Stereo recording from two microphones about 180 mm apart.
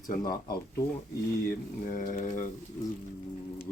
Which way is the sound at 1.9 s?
45° left (ahead or behind).